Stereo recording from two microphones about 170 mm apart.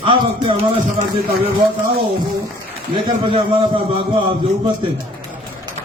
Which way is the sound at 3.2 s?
35° right (ahead or behind).